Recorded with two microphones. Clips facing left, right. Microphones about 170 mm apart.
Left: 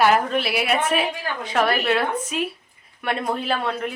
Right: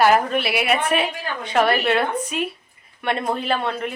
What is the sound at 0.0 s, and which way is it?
A woman's voice, 5° right (ahead or behind).